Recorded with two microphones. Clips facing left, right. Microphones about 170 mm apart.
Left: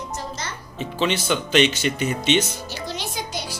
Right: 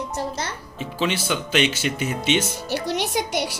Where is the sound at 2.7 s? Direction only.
70° right (ahead or behind).